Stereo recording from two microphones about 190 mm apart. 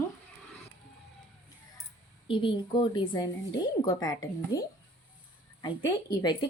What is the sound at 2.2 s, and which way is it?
A woman's voice, 25° left (ahead or behind).